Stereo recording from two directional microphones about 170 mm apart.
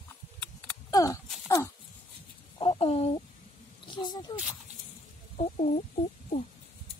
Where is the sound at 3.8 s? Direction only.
25° left (ahead or behind).